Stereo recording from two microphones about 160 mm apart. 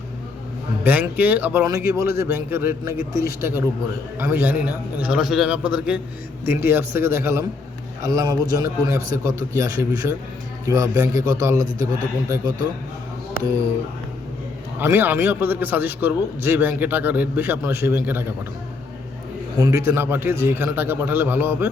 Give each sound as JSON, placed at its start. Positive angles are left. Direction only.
{"t": 0.9, "sound": "a man's voice", "side_deg": -10}
{"t": 14.8, "sound": "a man's voice", "side_deg": -15}
{"t": 19.5, "sound": "a man's voice", "side_deg": -20}